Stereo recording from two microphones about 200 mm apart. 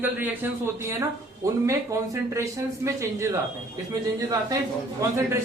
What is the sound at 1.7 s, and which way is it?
Speech, 15° right (ahead or behind).